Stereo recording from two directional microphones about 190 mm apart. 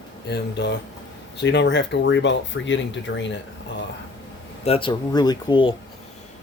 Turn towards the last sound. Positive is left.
turn(degrees=25)  # may be behind; listen again after turning